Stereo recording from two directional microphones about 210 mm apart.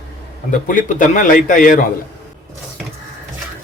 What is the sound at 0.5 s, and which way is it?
A man's voice, 40° left (ahead or behind).